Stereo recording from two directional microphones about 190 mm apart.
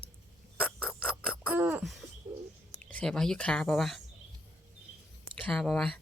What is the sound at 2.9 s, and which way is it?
Speech, 5° left (ahead or behind).